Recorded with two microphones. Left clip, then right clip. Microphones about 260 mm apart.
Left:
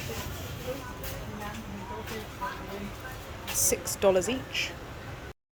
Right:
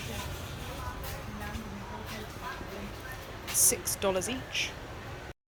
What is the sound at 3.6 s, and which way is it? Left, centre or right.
Music, centre.